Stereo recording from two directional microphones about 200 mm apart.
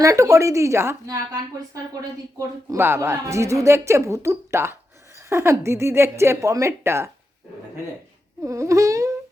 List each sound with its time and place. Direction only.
0.0 s speech: 15° right (ahead or behind)
8.4 s speech: 15° right (ahead or behind)